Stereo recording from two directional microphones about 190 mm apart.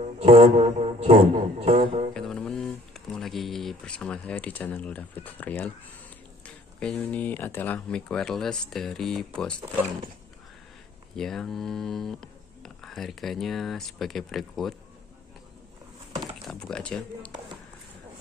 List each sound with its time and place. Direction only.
0.0 s music: 35° right (ahead or behind)
2.1 s speech: 5° left (ahead or behind)
11.1 s speech: 5° left (ahead or behind)
16.4 s speech: 5° left (ahead or behind)